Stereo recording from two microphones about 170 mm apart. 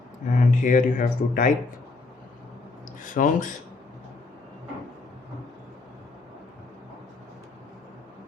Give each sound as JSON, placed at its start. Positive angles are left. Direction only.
{"t": 0.3, "sound": "speech", "side_deg": 45}
{"t": 3.0, "sound": "speech", "side_deg": 50}